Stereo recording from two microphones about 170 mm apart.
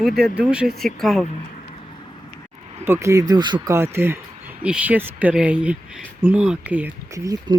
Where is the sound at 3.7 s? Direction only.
15° right (ahead or behind).